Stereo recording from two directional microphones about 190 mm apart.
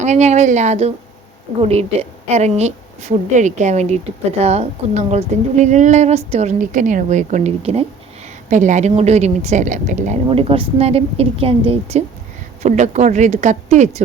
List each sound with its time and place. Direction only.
0.0 s a woman's voice: 35° right (ahead or behind)
10.2 s a woman's voice: 30° right (ahead or behind)